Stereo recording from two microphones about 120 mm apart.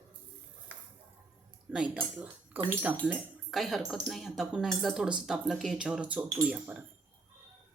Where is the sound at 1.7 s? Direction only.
10° right (ahead or behind).